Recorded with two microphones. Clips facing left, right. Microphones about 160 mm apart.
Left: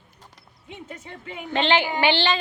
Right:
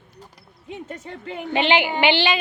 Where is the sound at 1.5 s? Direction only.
15° right (ahead or behind).